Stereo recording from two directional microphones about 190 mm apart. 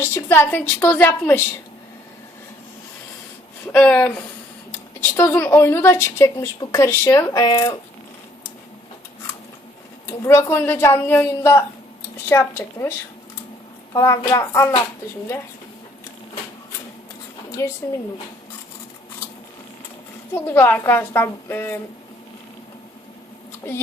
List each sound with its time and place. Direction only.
0.0 s speech: 10° left (ahead or behind)
3.7 s speech: 5° left (ahead or behind)
10.1 s speech: 15° left (ahead or behind)
17.6 s speech: 15° left (ahead or behind)
20.3 s speech: 10° left (ahead or behind)
23.6 s speech: 10° left (ahead or behind)